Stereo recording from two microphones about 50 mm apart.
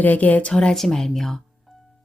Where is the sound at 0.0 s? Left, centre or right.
Left.